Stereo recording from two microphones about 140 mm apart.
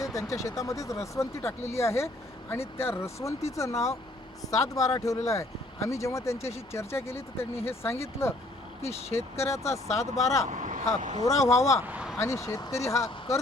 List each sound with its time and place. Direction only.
0.0 s speech: 25° left (ahead or behind)
8.8 s speech: 50° left (ahead or behind)
9.1 s speech: 20° left (ahead or behind)
10.5 s vehicle: 65° right (ahead or behind)
11.0 s speech: 60° right (ahead or behind)
11.5 s speech: 20° left (ahead or behind)
11.8 s speech: 10° right (ahead or behind)
12.2 s speech: 20° left (ahead or behind)